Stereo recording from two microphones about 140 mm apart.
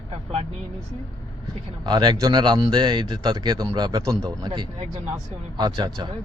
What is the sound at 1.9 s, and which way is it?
A man's voice, 30° right (ahead or behind).